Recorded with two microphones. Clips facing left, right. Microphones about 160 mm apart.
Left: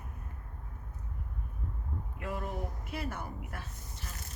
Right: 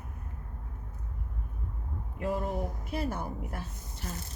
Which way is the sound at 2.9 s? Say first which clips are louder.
Right 6 dB; 35° right (ahead or behind).